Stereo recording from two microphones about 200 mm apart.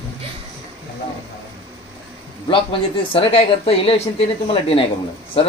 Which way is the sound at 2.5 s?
25° left (ahead or behind).